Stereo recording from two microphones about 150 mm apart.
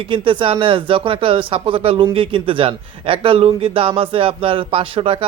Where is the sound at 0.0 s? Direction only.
35° right (ahead or behind).